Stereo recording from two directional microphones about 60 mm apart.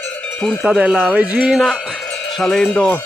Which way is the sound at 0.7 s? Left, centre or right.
Centre.